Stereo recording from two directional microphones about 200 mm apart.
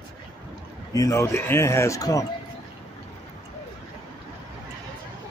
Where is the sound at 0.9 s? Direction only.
15° left (ahead or behind).